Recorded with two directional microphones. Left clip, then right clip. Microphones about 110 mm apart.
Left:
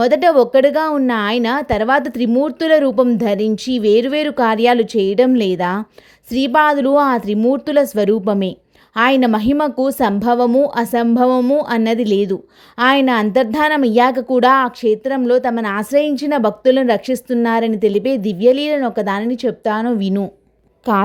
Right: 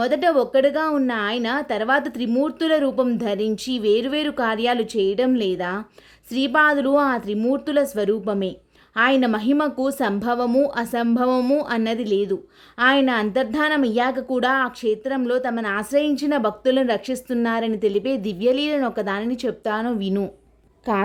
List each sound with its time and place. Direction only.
0.0 s speech: 65° left (ahead or behind)
1.0 s speech: 85° left; by 2.3 s 65° left (ahead or behind)
2.4 s speech: 50° left (ahead or behind); by 5.8 s 80° left
6.3 s speech: 55° left (ahead or behind)
16.0 s a woman's voice: 50° left (ahead or behind)
18.8 s speech: 35° left (ahead or behind)
19.0 s a woman's voice: 55° left (ahead or behind)
20.9 s speech: 75° left (ahead or behind)